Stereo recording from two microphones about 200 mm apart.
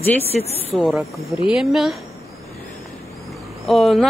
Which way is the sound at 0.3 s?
30° left (ahead or behind).